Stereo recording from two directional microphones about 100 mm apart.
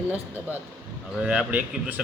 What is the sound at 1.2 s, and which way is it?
Speech, 15° right (ahead or behind).